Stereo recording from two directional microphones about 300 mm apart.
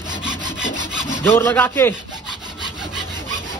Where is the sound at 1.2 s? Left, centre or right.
Centre.